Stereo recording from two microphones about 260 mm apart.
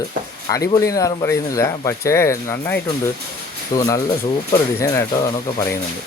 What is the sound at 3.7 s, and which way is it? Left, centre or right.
Speech, centre.